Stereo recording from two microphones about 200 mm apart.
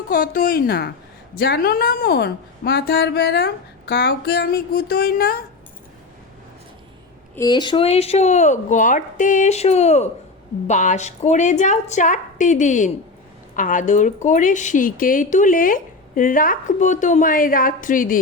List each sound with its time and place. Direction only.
0.1 s a woman's voice: 45° left (ahead or behind)
7.3 s speech: 20° left (ahead or behind); by 18.2 s 45° left (ahead or behind)